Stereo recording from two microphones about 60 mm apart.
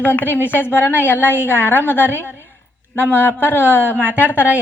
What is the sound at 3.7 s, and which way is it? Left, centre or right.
Speech, right.